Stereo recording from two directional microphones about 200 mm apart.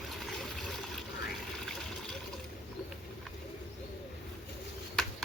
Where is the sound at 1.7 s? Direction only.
Centre (ahead or behind).